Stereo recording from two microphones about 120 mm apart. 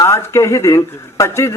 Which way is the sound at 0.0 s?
20° left (ahead or behind).